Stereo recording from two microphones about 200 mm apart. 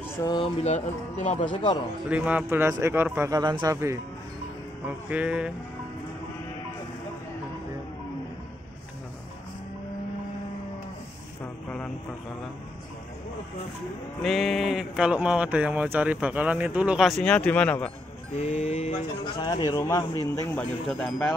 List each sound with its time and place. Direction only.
0.2 s speech: 20° left (ahead or behind)
0.7 s speech: 35° left (ahead or behind)
2.0 s speech: 5° right (ahead or behind)
14.2 s speech: centre (ahead or behind)
18.3 s speech: 35° left (ahead or behind); by 20.6 s 15° left (ahead or behind)
20.9 s speech: centre (ahead or behind)